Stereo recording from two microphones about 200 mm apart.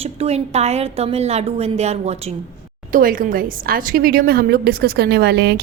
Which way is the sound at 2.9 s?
45° right (ahead or behind).